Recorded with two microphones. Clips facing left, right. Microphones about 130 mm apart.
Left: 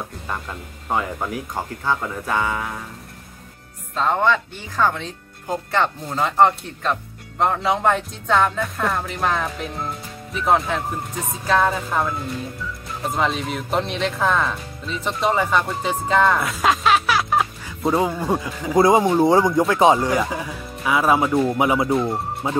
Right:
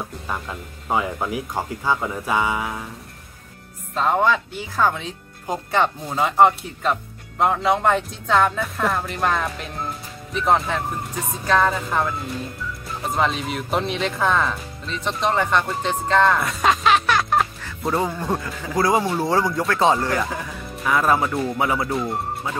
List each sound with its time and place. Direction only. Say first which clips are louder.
0.3 s speech: even; 5° right (ahead or behind)
3.9 s speech: even; 5° right (ahead or behind)
21.5 s speech: left 3 dB; 15° left (ahead or behind)
21.8 s speech: left 4 dB; centre (ahead or behind)
22.4 s speech: left 10 dB; 25° left (ahead or behind)